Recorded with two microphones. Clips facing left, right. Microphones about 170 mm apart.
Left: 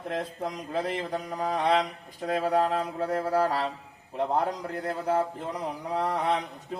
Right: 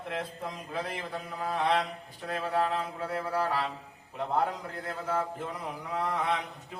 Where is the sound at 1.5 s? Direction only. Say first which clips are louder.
Left 3 dB; 40° left (ahead or behind).